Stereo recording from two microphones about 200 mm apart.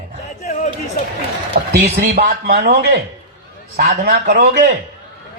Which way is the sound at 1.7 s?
50° right (ahead or behind).